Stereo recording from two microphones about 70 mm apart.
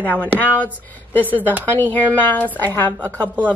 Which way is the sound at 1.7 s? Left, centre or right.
Left.